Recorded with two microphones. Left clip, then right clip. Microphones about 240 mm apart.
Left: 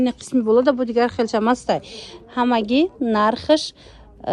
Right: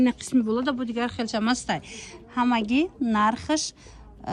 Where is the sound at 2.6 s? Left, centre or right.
Right.